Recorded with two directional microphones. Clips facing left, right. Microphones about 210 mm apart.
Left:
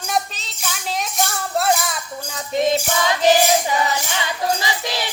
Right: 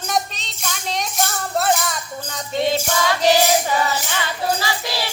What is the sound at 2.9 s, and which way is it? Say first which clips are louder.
Music: even; 15° left (ahead or behind).